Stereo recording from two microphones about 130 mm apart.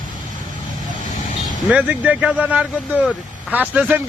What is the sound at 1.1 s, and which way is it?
Vehicle, 75° left (ahead or behind).